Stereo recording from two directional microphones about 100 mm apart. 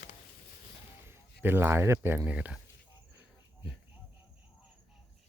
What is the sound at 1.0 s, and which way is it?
Speech, 25° right (ahead or behind).